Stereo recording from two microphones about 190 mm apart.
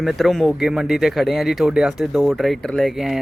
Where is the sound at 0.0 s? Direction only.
Centre (ahead or behind).